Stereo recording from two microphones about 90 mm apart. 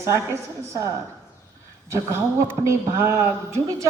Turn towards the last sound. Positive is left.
turn(degrees=-30)  # may be behind; listen again after turning